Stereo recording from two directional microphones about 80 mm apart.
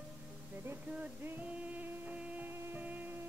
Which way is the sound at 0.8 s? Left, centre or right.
Centre.